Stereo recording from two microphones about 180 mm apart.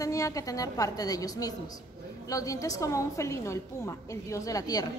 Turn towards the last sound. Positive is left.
turn(degrees=20)  # may be behind; listen again after turning